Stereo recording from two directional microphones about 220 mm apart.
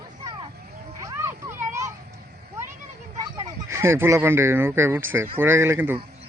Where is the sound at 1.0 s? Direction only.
15° right (ahead or behind).